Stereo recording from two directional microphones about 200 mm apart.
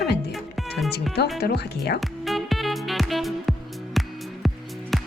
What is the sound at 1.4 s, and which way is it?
Speech, 55° left (ahead or behind).